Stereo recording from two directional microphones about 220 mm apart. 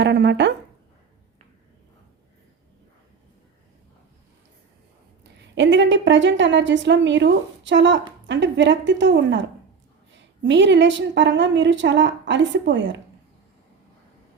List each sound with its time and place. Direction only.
0.0 s speech: 50° right (ahead or behind)
5.5 s a woman's voice: 55° right (ahead or behind)